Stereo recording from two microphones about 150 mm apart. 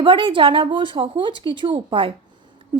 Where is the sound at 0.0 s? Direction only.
35° right (ahead or behind).